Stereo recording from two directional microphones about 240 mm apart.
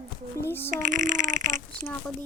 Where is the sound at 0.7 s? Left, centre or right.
Right.